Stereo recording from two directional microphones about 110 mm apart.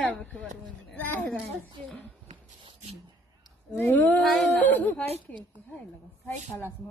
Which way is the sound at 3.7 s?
15° left (ahead or behind).